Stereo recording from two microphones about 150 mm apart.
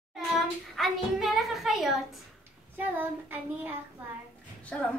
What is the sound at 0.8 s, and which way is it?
A woman's voice, centre (ahead or behind).